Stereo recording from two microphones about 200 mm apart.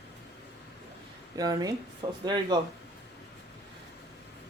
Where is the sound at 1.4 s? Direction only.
20° right (ahead or behind).